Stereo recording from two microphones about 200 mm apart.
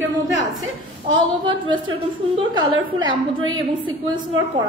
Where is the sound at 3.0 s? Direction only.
25° right (ahead or behind).